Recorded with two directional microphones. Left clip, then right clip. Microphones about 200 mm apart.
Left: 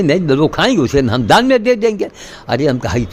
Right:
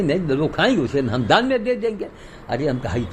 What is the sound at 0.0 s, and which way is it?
A man's voice, 55° left (ahead or behind).